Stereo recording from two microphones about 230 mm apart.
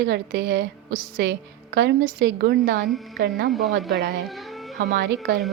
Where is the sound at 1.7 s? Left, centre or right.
Right.